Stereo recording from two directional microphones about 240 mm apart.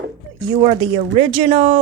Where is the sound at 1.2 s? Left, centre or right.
Right.